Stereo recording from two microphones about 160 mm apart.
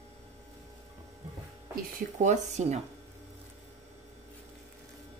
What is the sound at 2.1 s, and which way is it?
Speech, 50° right (ahead or behind).